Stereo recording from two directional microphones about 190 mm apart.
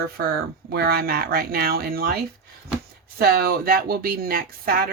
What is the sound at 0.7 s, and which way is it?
Speech, 55° right (ahead or behind).